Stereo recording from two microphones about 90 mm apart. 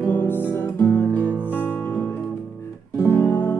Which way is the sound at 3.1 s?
20° left (ahead or behind).